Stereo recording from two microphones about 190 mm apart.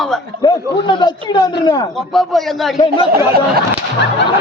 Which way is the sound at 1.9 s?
Centre (ahead or behind).